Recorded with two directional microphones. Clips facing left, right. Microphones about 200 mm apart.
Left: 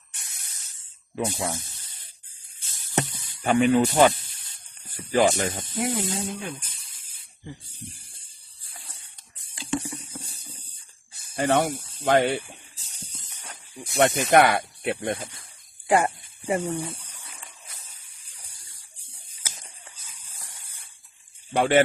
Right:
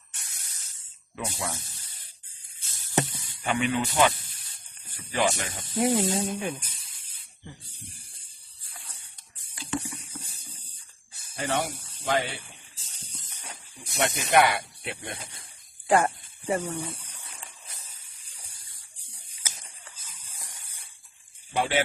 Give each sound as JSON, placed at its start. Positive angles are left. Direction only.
{"t": 1.1, "sound": "speech", "side_deg": 25}
{"t": 3.4, "sound": "speech", "side_deg": 40}
{"t": 5.8, "sound": "speech", "side_deg": -20}
{"t": 9.6, "sound": "patter", "side_deg": 25}
{"t": 11.3, "sound": "speech", "side_deg": 55}
{"t": 13.9, "sound": "speech", "side_deg": 45}
{"t": 15.9, "sound": "speech", "side_deg": 15}
{"t": 21.5, "sound": "speech", "side_deg": 50}